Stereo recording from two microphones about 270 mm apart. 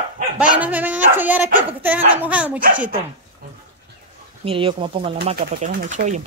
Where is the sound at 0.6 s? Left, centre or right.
Centre.